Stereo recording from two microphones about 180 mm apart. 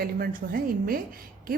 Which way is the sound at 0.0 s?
55° right (ahead or behind).